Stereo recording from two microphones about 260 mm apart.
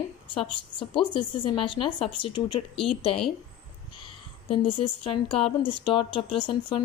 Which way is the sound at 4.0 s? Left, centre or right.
Centre.